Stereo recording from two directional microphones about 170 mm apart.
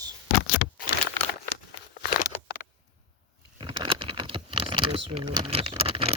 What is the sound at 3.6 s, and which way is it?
Computer keyboard, 30° right (ahead or behind).